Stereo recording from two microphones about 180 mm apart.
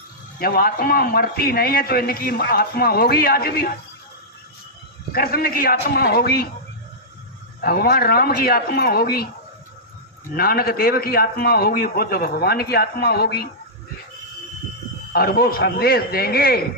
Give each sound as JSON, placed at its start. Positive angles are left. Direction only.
{"t": 0.3, "sound": "a man's voice", "side_deg": 55}
{"t": 5.1, "sound": "a man's voice", "side_deg": 55}
{"t": 7.6, "sound": "a man's voice", "side_deg": 55}
{"t": 10.3, "sound": "a man's voice", "side_deg": 55}
{"t": 15.1, "sound": "a man's voice", "side_deg": 60}